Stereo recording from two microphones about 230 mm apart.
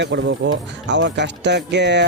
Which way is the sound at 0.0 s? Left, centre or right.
Right.